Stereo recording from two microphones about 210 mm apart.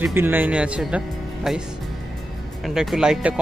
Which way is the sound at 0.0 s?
10° right (ahead or behind).